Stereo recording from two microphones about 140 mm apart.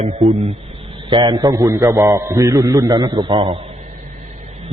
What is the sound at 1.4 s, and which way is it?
A man's voice, 25° right (ahead or behind).